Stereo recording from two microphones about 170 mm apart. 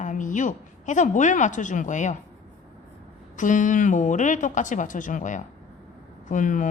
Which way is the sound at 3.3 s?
50° left (ahead or behind).